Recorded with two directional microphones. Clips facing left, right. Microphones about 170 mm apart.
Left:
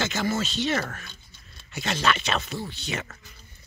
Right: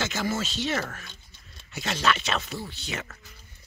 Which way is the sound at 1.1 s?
15° right (ahead or behind).